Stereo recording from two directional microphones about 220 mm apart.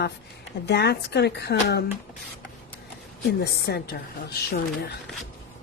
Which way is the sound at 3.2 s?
45° left (ahead or behind).